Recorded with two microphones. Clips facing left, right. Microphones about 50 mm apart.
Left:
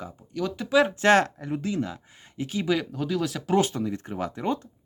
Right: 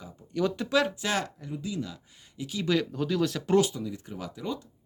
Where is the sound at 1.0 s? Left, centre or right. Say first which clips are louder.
Left 11 dB; left.